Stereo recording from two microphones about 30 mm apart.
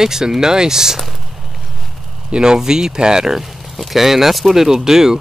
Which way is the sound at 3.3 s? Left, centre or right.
Centre.